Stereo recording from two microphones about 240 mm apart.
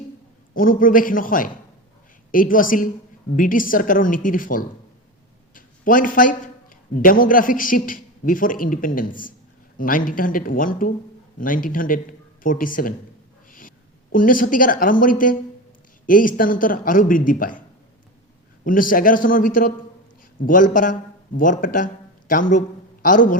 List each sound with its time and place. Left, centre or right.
0.5 s a man's voice: left
18.6 s a man's voice: left